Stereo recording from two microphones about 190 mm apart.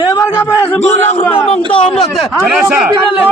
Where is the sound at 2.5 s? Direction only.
Centre (ahead or behind).